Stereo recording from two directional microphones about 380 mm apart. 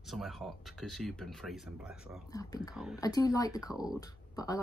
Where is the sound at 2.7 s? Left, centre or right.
Centre.